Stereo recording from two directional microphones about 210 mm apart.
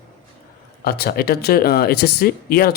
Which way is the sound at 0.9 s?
45° left (ahead or behind).